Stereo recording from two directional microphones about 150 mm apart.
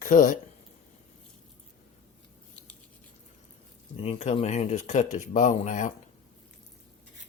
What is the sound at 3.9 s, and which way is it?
Speech, 40° left (ahead or behind).